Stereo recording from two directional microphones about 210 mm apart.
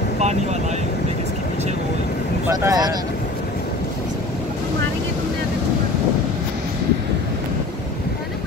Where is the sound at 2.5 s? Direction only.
15° right (ahead or behind).